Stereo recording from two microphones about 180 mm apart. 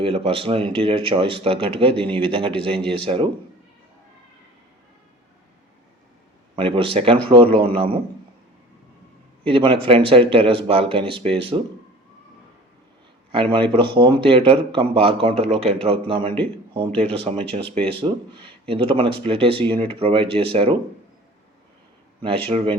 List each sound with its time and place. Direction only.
0.0 s a man's voice: 30° right (ahead or behind)
6.6 s a man's voice: 30° right (ahead or behind)
9.4 s speech: 30° right (ahead or behind)
13.3 s a man's voice: 30° right (ahead or behind)
22.4 s speech: 30° right (ahead or behind)